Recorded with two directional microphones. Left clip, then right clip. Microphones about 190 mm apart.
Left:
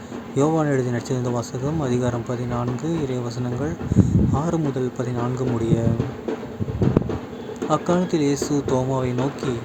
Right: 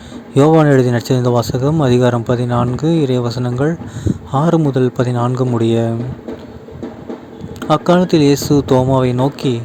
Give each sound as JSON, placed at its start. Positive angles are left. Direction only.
{"t": 0.3, "sound": "speech", "side_deg": -45}
{"t": 7.7, "sound": "speech", "side_deg": -45}